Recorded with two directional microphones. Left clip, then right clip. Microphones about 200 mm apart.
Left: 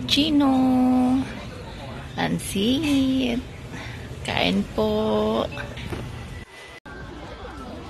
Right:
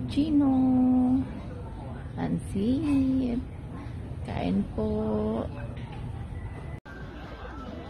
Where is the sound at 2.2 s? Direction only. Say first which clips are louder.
Left 7 dB; 5° right (ahead or behind).